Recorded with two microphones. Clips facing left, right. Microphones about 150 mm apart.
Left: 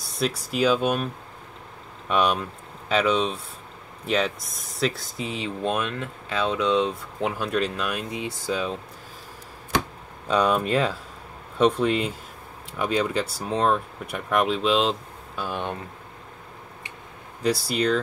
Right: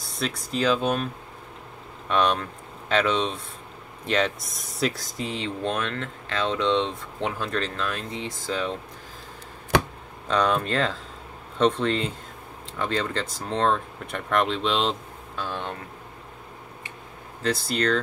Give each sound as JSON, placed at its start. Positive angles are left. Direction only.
{"t": 0.5, "sound": "speech", "side_deg": 10}
{"t": 2.0, "sound": "speech", "side_deg": 10}
{"t": 10.2, "sound": "speech", "side_deg": 10}
{"t": 15.4, "sound": "speech", "side_deg": 15}
{"t": 17.4, "sound": "speech", "side_deg": 10}